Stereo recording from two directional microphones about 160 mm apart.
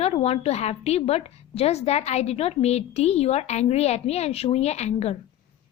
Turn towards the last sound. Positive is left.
turn(degrees=40)  # may be behind; listen again after turning